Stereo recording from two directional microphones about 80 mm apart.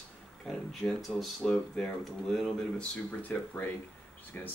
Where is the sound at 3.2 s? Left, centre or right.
Centre.